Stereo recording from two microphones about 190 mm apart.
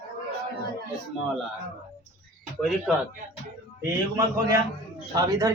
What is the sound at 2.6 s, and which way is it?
Speech, centre (ahead or behind).